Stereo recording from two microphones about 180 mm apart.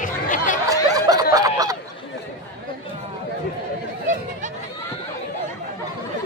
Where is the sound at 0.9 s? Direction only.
20° right (ahead or behind).